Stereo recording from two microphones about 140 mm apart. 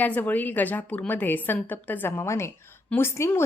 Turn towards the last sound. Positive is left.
turn(degrees=15)  # may be behind; listen again after turning